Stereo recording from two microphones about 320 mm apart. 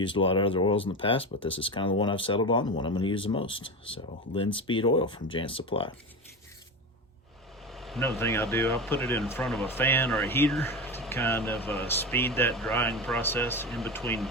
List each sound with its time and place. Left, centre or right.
0.0 s speech: centre
7.7 s speech: centre